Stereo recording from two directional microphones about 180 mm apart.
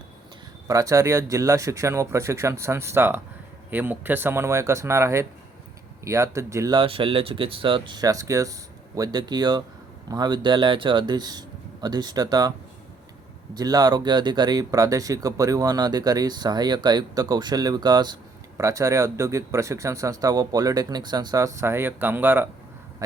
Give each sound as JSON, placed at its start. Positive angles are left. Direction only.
{"t": 0.7, "sound": "speech", "side_deg": -20}